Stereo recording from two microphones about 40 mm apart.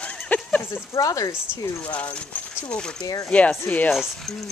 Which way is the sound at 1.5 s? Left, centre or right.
Left.